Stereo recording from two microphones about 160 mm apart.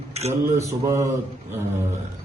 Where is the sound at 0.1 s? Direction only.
40° right (ahead or behind).